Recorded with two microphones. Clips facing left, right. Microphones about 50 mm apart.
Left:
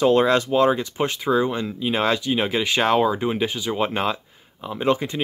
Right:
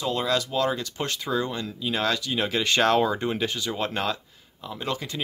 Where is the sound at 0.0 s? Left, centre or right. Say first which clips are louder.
Left 9 dB; left.